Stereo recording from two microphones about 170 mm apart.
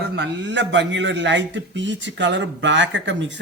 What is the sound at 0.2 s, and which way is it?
A man's voice, 90° right.